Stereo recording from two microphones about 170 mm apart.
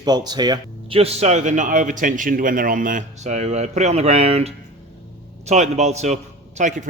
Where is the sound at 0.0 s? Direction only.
25° right (ahead or behind).